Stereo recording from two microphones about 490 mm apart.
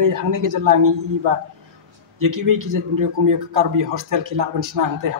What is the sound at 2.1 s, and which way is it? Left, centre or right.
A man's voice, right.